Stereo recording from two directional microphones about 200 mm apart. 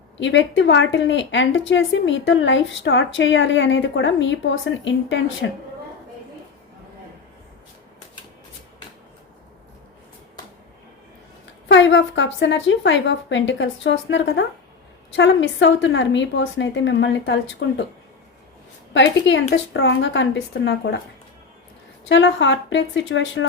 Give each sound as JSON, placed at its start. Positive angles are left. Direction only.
{"t": 0.2, "sound": "a woman's voice", "side_deg": 65}
{"t": 11.7, "sound": "a woman's voice", "side_deg": 65}
{"t": 18.9, "sound": "a woman's voice", "side_deg": 65}
{"t": 22.1, "sound": "a woman's voice", "side_deg": 65}